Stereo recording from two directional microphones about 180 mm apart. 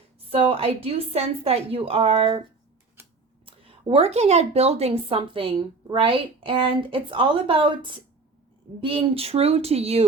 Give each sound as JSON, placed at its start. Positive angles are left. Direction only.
{"t": 0.3, "sound": "a woman's voice", "side_deg": -30}
{"t": 3.4, "sound": "a woman's voice", "side_deg": -30}